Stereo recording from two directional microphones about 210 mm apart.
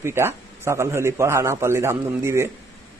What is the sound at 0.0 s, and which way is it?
Speech, 10° right (ahead or behind).